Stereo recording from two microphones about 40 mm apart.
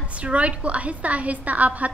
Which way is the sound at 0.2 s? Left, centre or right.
Right.